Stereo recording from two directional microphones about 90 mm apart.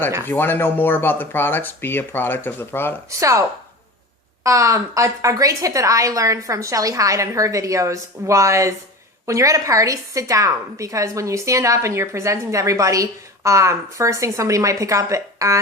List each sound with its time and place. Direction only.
0.3 s speech: 25° left (ahead or behind)
3.2 s a woman's voice: 35° right (ahead or behind)
4.4 s a woman's voice: 35° right (ahead or behind)